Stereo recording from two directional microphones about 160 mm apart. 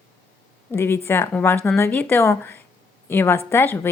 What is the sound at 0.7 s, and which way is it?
Speech, 15° left (ahead or behind).